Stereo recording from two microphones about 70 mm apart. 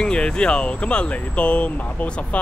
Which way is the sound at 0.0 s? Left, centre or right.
Centre.